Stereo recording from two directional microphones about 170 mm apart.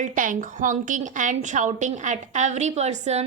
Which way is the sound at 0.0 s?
50° right (ahead or behind).